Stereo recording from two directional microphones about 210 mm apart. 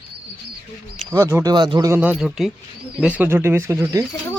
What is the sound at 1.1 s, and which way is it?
Speech, 15° right (ahead or behind).